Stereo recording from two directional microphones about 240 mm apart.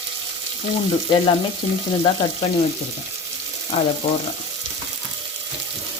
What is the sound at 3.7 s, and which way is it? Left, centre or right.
Frying, left.